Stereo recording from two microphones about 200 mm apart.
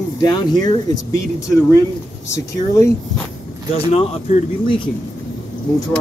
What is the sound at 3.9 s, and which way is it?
Speech, 30° left (ahead or behind).